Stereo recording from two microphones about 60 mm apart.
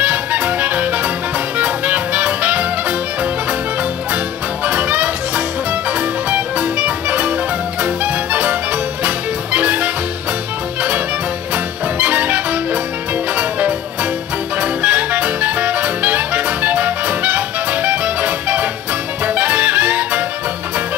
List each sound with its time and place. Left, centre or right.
0.0 s music: right
4.6 s music: right
11.5 s music: right
13.4 s music: right